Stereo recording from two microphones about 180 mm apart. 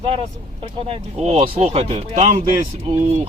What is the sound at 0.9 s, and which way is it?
Speech, 35° right (ahead or behind).